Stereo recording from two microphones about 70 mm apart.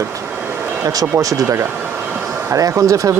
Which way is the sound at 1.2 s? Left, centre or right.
Right.